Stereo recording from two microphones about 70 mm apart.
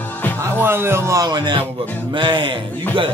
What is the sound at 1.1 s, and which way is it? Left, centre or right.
Speech, right.